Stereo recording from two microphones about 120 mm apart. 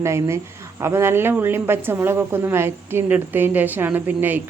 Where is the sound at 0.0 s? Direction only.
25° right (ahead or behind).